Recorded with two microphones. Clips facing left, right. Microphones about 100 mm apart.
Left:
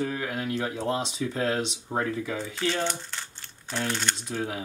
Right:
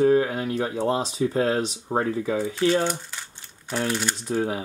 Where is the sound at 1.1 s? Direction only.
35° right (ahead or behind).